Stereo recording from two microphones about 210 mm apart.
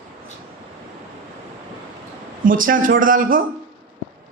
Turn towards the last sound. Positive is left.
turn(degrees=-40)  # may be behind; listen again after turning